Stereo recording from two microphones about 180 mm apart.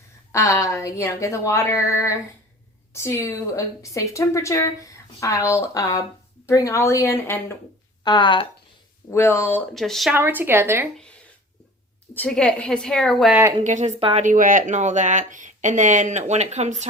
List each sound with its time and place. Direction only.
0.3 s a woman's voice: 15° left (ahead or behind)
8.0 s speech: 25° left (ahead or behind)
9.0 s a woman's voice: 15° left (ahead or behind)
9.7 s a woman's voice: centre (ahead or behind)
10.2 s a woman's voice: 10° right (ahead or behind)
10.9 s a woman's voice: 5° left (ahead or behind)
13.7 s speech: 40° right (ahead or behind)
14.3 s speech: 45° right (ahead or behind)